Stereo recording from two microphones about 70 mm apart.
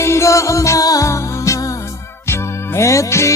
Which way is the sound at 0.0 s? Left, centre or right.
Left.